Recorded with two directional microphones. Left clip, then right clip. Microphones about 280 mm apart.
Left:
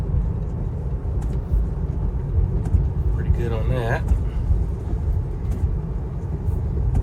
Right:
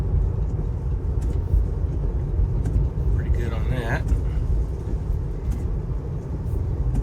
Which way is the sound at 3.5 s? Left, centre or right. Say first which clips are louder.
Left 5 dB; centre.